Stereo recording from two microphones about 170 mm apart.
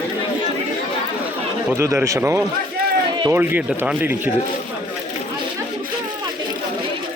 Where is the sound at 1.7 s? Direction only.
15° right (ahead or behind).